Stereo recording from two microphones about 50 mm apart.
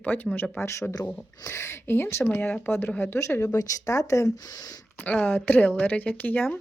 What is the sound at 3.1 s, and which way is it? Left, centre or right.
Speech, left.